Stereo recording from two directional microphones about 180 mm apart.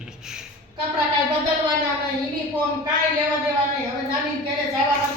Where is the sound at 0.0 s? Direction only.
5° right (ahead or behind).